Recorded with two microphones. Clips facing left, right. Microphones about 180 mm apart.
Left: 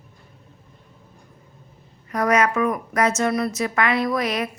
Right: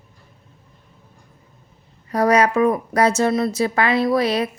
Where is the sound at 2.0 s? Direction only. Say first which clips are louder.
Right 3 dB; 30° right (ahead or behind).